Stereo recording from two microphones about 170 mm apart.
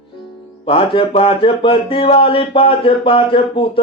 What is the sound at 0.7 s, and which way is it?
Speech, 30° left (ahead or behind).